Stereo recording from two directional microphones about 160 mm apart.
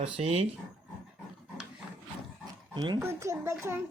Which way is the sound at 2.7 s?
25° right (ahead or behind).